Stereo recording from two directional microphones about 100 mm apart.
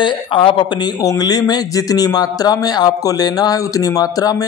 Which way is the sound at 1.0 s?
40° left (ahead or behind).